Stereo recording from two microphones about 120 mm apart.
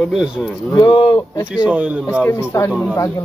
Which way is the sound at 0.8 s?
40° left (ahead or behind).